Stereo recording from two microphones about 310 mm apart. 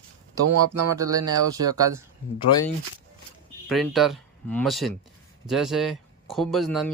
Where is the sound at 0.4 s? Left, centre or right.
Right.